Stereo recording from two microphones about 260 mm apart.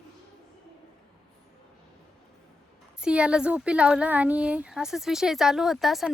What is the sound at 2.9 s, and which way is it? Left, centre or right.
A woman's voice, centre.